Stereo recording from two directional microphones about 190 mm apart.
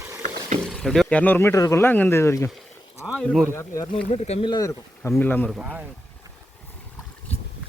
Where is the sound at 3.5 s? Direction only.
15° left (ahead or behind).